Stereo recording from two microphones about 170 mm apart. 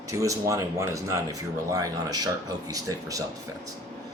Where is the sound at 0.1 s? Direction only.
20° right (ahead or behind).